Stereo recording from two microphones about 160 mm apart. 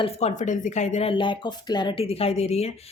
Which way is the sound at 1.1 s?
30° left (ahead or behind).